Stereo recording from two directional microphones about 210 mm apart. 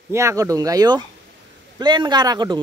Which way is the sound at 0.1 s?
15° right (ahead or behind).